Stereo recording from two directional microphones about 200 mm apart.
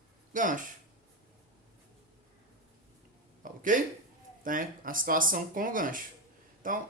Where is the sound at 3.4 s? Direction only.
45° right (ahead or behind).